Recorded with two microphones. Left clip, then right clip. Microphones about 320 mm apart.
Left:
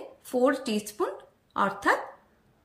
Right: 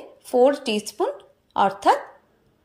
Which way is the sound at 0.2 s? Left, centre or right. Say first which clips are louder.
Right 7 dB; centre.